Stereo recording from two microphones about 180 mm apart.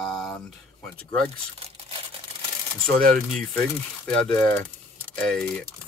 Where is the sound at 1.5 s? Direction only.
35° right (ahead or behind).